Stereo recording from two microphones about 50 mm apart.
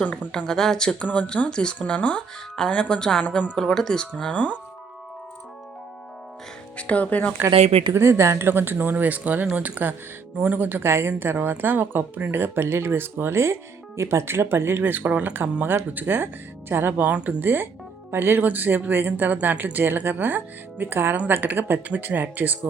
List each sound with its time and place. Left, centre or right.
0.0 s speech: left
0.3 s speech: centre
0.9 s speech: left
1.5 s speech: centre
3.6 s speech: centre
6.7 s speech: left
7.9 s speech: right
8.4 s speech: right
17.1 s speech: right
17.4 s speech: right